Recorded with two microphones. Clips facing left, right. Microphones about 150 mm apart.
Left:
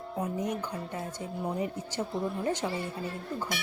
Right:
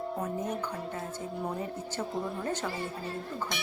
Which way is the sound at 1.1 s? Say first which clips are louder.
Left 2 dB; 15° left (ahead or behind).